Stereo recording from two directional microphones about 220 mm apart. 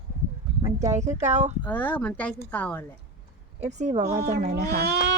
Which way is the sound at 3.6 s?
30° right (ahead or behind).